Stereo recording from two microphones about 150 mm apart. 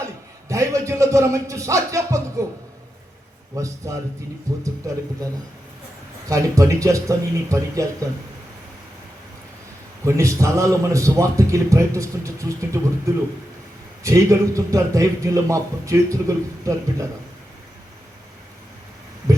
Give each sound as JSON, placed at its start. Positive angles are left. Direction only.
{"t": 0.0, "sound": "a sound", "side_deg": -20}
{"t": 3.5, "sound": "a man's voice", "side_deg": -20}
{"t": 6.2, "sound": "a man's voice", "side_deg": -20}
{"t": 10.0, "sound": "a man's voice", "side_deg": -20}
{"t": 14.0, "sound": "a man's voice", "side_deg": -20}